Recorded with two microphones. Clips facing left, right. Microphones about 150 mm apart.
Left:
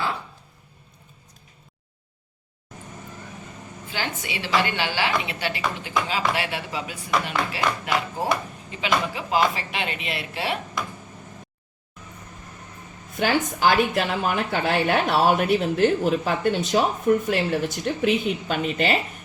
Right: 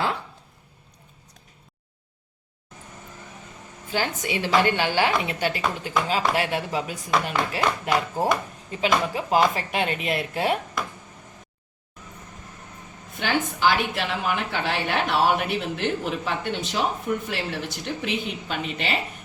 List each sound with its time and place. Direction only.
3.9 s a woman's voice: 45° right (ahead or behind)
13.1 s a woman's voice: 45° left (ahead or behind)